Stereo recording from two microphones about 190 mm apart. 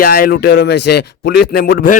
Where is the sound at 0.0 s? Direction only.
50° left (ahead or behind).